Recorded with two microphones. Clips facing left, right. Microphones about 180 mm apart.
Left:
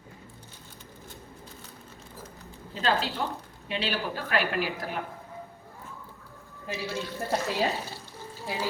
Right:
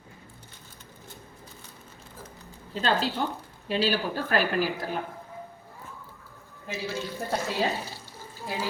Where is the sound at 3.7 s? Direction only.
35° right (ahead or behind).